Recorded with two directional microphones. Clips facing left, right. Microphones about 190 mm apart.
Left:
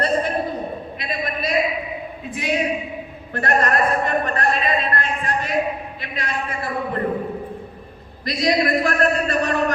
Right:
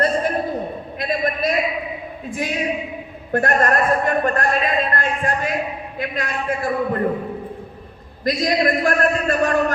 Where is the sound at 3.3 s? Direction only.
50° right (ahead or behind).